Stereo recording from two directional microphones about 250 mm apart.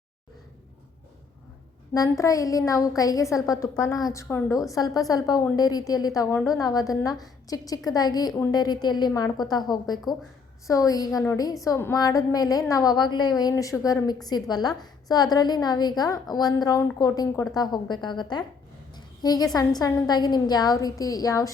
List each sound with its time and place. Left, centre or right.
1.9 s a woman's voice: centre
18.9 s a sound: centre
19.5 s a woman's voice: centre